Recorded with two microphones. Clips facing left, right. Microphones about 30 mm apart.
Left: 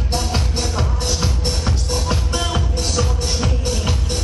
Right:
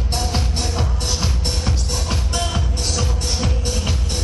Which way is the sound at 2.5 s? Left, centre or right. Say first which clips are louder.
Left 3 dB; centre.